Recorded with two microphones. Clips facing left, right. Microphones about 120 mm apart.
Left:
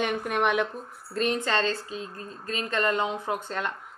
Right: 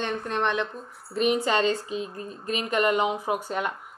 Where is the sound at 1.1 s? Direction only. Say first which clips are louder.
Right 3 dB; 10° right (ahead or behind).